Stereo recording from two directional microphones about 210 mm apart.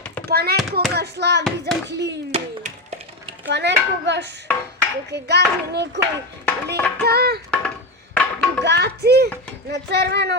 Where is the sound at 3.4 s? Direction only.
55° right (ahead or behind).